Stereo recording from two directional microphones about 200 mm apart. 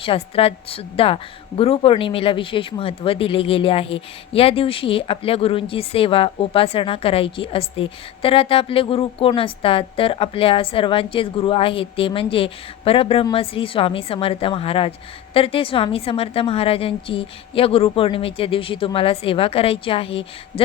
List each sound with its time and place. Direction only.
0.0 s a woman's voice: 30° left (ahead or behind)